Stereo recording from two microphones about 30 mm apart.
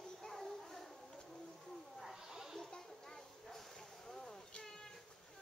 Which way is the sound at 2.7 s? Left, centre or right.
Centre.